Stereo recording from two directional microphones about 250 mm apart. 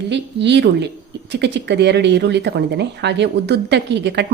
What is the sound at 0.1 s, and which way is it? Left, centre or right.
Speech, right.